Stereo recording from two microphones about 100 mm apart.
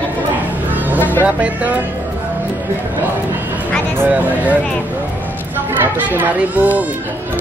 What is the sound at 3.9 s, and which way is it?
Speech, 20° right (ahead or behind).